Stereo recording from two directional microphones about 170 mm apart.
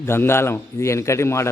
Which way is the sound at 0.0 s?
15° left (ahead or behind).